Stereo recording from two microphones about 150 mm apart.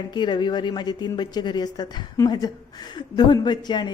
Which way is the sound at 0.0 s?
30° left (ahead or behind).